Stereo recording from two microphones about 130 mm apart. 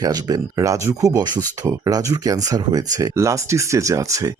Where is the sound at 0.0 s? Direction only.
30° right (ahead or behind).